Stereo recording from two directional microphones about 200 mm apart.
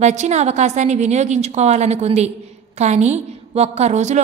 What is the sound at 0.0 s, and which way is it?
A woman's voice, 35° right (ahead or behind).